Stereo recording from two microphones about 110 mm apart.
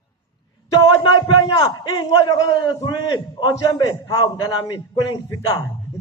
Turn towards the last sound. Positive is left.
turn(degrees=35)  # may be behind; listen again after turning